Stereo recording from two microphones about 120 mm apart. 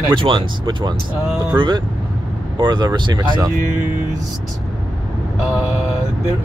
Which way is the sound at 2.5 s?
40° right (ahead or behind).